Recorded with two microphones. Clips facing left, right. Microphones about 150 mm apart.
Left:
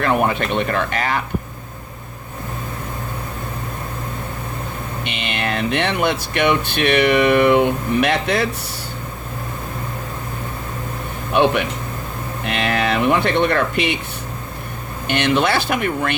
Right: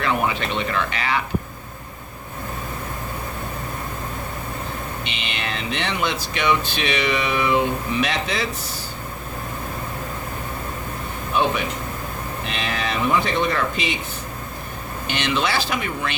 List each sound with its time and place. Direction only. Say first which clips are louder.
0.0 s speech: left 4 dB; 50° left (ahead or behind)
5.0 s speech: left 5 dB; 55° left (ahead or behind)
11.3 s speech: left 5 dB; 65° left (ahead or behind)
15.0 s speech: left 6 dB; 55° left (ahead or behind)